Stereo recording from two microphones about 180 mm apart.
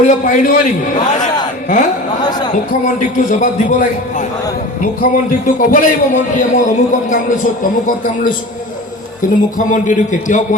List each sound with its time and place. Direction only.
0.0 s a man's voice: 45° left (ahead or behind)
9.6 s a man's voice: 45° left (ahead or behind)